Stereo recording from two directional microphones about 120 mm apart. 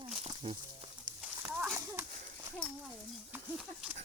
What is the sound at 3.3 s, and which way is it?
Speech, 10° right (ahead or behind).